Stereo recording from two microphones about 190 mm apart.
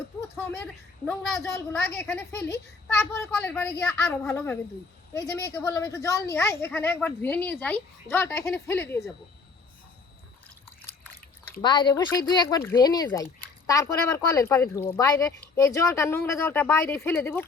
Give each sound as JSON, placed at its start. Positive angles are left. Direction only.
{"t": 0.3, "sound": "a woman's voice", "side_deg": 10}
{"t": 11.6, "sound": "a woman's voice", "side_deg": 25}